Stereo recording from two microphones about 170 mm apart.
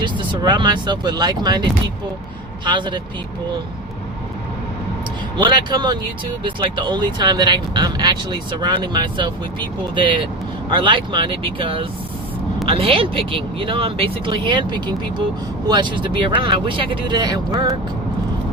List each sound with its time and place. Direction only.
0.0 s speech: 25° right (ahead or behind)
2.6 s speech: 25° right (ahead or behind)
5.4 s speech: 25° right (ahead or behind)